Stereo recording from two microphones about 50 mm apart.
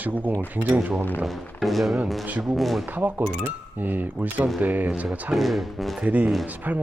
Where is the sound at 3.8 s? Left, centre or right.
Right.